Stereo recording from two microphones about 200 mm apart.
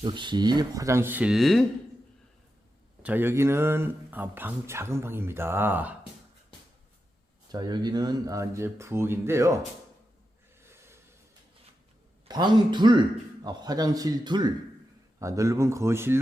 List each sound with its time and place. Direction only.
0.0 s speech: 25° right (ahead or behind); by 1.6 s centre (ahead or behind)
3.0 s speech: 10° right (ahead or behind)
7.5 s speech: 20° right (ahead or behind)
10.6 s a sound: 10° right (ahead or behind)
12.3 s speech: 20° right (ahead or behind)